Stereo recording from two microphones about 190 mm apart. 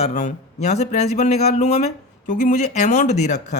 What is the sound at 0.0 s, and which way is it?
Speech, 40° left (ahead or behind).